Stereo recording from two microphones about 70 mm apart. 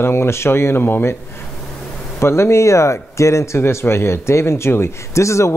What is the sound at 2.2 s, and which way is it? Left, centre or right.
Speech, left.